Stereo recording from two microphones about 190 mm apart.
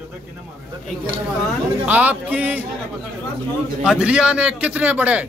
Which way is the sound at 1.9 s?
10° right (ahead or behind).